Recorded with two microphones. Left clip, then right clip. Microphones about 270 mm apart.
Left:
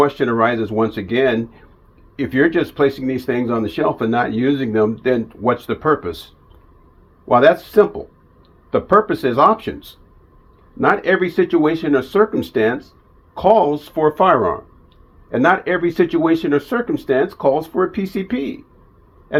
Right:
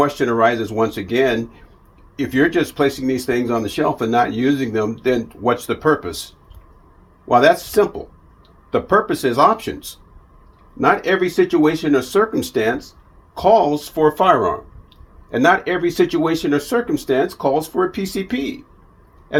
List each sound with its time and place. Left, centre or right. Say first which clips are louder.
0.0 s speech: even; centre
7.3 s speech: left 1 dB; centre
10.8 s speech: left 1 dB; centre